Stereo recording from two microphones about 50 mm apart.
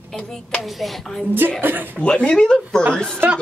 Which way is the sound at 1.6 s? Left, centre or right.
Right.